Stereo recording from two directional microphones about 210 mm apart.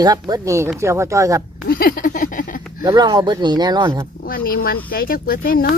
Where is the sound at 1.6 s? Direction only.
45° left (ahead or behind).